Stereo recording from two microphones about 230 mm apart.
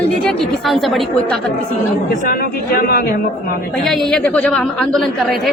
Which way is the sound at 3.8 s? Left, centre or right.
Centre.